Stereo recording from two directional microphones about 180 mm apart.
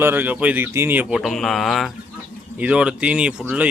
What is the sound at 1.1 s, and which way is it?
Speech, centre (ahead or behind).